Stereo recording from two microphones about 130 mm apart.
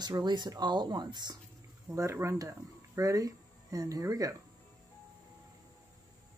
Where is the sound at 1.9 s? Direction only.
20° right (ahead or behind).